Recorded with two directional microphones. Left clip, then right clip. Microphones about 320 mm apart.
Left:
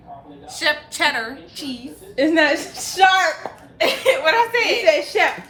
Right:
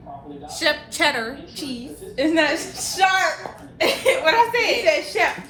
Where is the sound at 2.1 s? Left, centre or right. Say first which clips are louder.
Left 3 dB; left.